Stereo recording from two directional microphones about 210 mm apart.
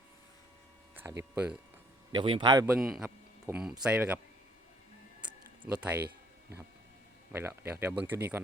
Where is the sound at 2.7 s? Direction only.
Centre (ahead or behind).